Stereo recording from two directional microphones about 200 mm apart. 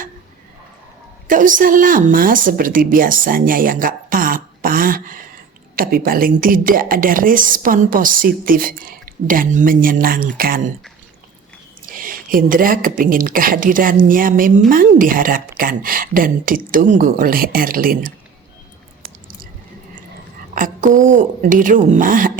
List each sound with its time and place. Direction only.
1.3 s a woman's voice: 40° right (ahead or behind)
11.9 s a woman's voice: 45° right (ahead or behind)
20.6 s a woman's voice: 40° right (ahead or behind)